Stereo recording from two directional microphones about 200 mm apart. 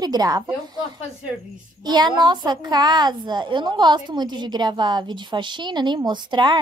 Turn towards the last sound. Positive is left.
turn(degrees=-20)  # may be behind; listen again after turning